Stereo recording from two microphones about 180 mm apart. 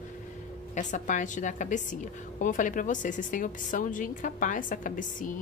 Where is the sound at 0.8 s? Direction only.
45° left (ahead or behind).